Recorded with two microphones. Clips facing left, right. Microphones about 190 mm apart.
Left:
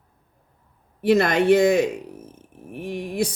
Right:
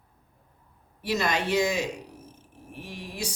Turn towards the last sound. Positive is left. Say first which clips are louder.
# left 11 dB
turn(degrees=55)  # may be behind; listen again after turning